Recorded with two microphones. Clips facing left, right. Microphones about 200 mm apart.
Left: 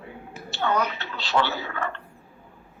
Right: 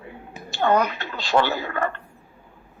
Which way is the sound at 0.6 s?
50° right (ahead or behind).